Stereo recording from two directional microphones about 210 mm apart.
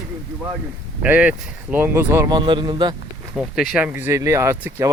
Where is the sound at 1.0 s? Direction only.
5° right (ahead or behind).